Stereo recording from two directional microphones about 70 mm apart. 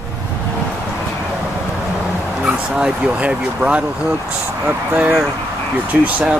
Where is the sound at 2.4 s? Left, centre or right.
Centre.